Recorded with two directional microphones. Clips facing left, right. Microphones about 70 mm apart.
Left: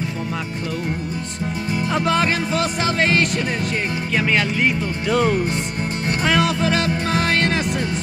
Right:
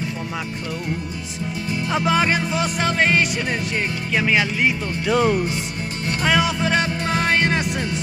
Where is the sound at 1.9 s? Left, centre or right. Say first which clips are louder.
Even; centre.